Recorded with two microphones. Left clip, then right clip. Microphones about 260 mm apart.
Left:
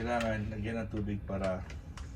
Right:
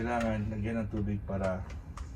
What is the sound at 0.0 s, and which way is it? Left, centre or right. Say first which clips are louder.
Speech: right 1 dB; centre.